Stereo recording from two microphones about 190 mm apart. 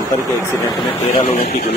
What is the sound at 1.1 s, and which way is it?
Speech, 40° left (ahead or behind).